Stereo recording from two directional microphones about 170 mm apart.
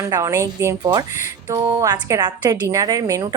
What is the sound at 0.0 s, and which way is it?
A woman's voice, 20° right (ahead or behind).